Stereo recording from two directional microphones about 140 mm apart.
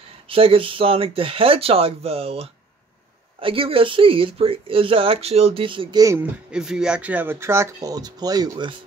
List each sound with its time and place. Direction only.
0.3 s speech: 40° right (ahead or behind)
6.5 s speech: 5° right (ahead or behind); by 8.7 s 30° right (ahead or behind)